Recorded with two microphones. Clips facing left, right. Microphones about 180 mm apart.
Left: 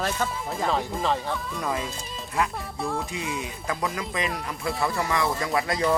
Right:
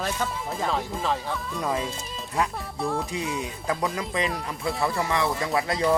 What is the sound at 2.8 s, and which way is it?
Speech, centre (ahead or behind).